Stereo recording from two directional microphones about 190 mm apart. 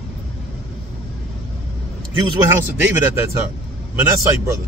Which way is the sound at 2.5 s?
10° right (ahead or behind).